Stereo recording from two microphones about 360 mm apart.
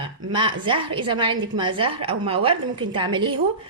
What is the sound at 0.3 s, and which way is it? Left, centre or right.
A woman's voice, centre.